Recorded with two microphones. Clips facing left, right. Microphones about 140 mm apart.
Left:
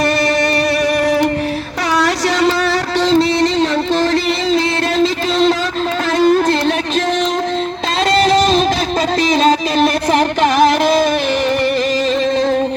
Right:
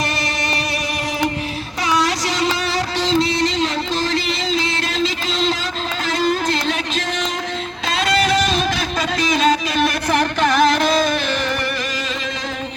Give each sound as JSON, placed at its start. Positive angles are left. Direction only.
{"t": 3.1, "sound": "a sound", "side_deg": 35}
{"t": 6.1, "sound": "music", "side_deg": 50}
{"t": 9.3, "sound": "music", "side_deg": 30}